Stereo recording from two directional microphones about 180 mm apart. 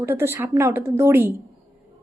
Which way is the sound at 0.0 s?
15° right (ahead or behind).